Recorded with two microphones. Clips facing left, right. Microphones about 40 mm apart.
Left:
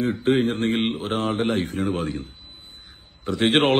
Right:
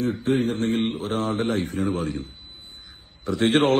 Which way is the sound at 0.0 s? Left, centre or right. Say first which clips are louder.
Left 2 dB; left.